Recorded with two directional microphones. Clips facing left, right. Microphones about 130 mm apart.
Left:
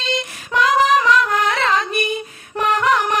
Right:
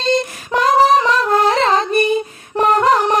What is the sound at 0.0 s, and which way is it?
Female singing, 40° right (ahead or behind).